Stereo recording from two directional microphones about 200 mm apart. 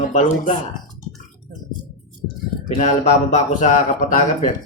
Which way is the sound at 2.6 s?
35° left (ahead or behind).